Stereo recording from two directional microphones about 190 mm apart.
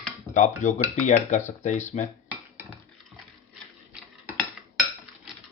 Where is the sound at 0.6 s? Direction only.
40° left (ahead or behind).